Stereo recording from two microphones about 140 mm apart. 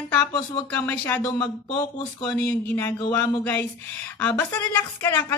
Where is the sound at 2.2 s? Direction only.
10° left (ahead or behind).